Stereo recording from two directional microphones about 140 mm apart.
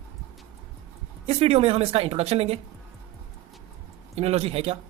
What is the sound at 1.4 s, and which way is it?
Speech, 45° right (ahead or behind).